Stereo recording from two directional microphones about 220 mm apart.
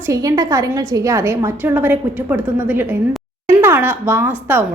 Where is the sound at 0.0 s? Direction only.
15° right (ahead or behind).